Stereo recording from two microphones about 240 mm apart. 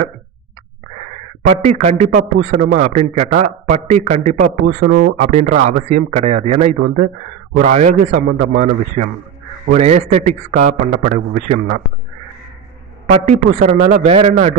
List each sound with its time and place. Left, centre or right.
1.5 s a man's voice: right
5.2 s a man's voice: right
8.3 s a man's voice: right
9.7 s a man's voice: right
13.0 s a man's voice: right